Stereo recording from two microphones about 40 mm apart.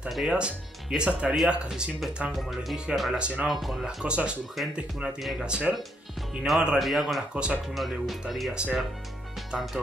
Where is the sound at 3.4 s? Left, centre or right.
Centre.